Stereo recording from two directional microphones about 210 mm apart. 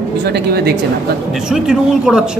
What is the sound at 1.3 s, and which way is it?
Speech, 5° right (ahead or behind).